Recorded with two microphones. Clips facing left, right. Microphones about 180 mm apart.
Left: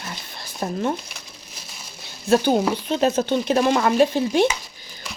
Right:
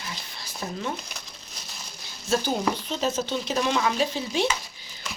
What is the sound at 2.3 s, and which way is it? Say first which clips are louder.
Speech: left 7 dB; 60° left (ahead or behind).